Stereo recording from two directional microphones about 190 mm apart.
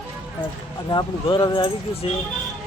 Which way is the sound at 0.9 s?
20° left (ahead or behind).